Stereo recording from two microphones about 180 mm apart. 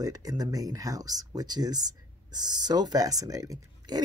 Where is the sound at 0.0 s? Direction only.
20° right (ahead or behind).